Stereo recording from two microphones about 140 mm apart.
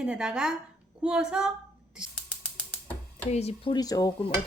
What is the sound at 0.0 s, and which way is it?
Speech, 5° right (ahead or behind).